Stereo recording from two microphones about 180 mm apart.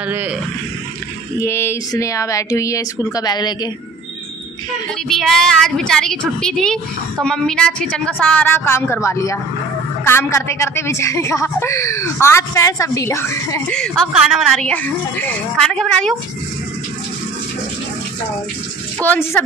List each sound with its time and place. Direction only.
0.0 s speech: 10° right (ahead or behind)
1.4 s speech: 15° left (ahead or behind)
5.0 s a woman's voice: centre (ahead or behind)
13.7 s a woman's voice: 5° left (ahead or behind)
18.9 s speech: 10° left (ahead or behind)